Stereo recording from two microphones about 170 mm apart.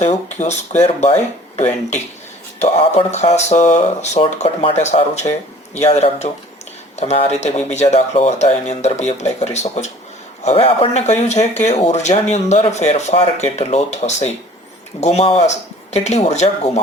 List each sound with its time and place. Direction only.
0.0 s speech: 40° left (ahead or behind)